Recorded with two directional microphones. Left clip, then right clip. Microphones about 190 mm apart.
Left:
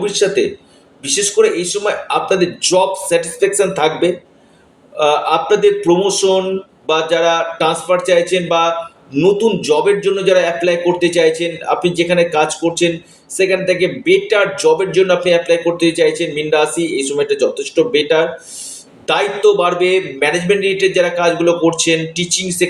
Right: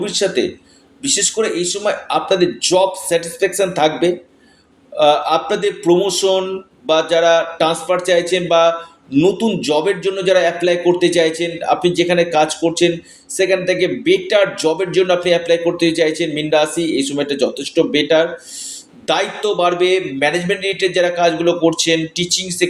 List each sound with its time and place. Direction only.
0.0 s speech: 40° right (ahead or behind)